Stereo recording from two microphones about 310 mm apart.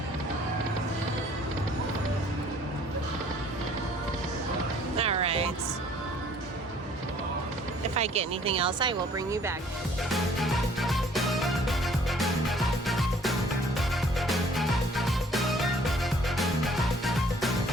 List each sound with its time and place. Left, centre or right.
4.9 s music: centre
7.9 s speech: centre
10.1 s music: centre